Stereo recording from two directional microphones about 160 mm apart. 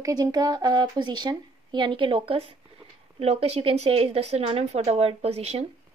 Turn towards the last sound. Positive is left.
turn(degrees=-40)  # may be behind; listen again after turning